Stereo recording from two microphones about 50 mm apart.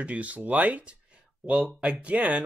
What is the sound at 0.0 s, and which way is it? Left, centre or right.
Speech, right.